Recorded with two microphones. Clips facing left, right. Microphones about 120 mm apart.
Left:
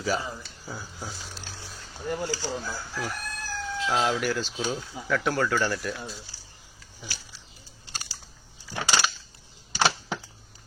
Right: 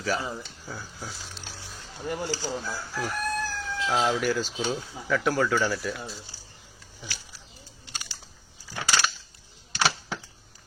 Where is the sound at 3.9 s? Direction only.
Centre (ahead or behind).